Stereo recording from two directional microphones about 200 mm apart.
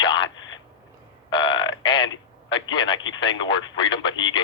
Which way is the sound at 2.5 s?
25° left (ahead or behind).